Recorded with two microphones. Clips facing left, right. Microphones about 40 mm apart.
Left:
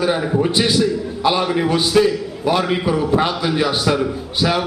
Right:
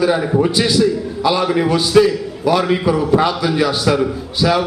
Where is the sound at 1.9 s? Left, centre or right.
Centre.